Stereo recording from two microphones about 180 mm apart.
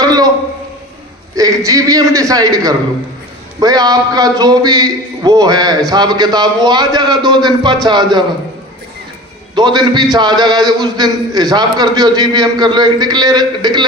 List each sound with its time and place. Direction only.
0.0 s a sound: 20° right (ahead or behind)
1.4 s a man's voice: 20° right (ahead or behind)
9.6 s a man's voice: 25° right (ahead or behind)